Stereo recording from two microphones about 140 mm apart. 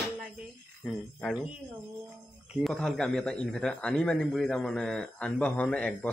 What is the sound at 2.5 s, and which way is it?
Speech, centre (ahead or behind).